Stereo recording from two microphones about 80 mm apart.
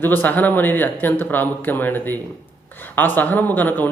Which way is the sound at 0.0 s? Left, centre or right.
Left.